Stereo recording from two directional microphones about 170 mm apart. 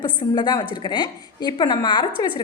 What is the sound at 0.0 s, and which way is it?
A woman's voice, 25° left (ahead or behind).